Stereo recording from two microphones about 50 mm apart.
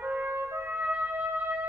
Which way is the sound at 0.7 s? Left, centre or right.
Right.